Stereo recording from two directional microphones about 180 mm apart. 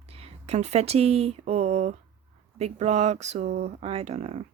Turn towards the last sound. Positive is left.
turn(degrees=-35)  # may be behind; listen again after turning